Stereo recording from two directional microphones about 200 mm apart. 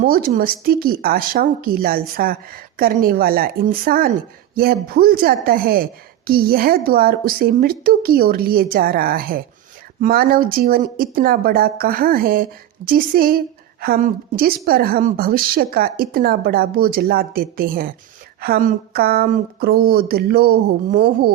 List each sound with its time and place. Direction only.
0.0 s a woman's voice: 45° right (ahead or behind)